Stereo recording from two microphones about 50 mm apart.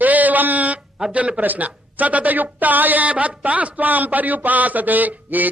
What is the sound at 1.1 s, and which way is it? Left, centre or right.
Speech, right.